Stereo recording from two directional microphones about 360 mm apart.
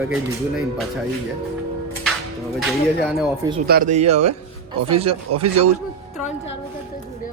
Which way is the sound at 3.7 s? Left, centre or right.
Right.